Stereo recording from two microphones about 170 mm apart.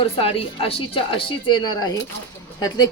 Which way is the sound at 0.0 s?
35° left (ahead or behind).